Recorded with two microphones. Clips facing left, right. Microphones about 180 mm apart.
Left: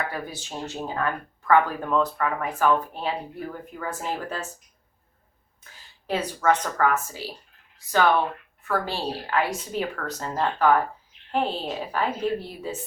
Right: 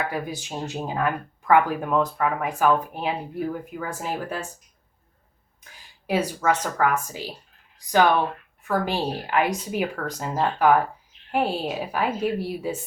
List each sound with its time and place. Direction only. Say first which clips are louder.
0.1 s speech: right 4 dB; 15° right (ahead or behind)
5.7 s speech: right 4 dB; 10° right (ahead or behind)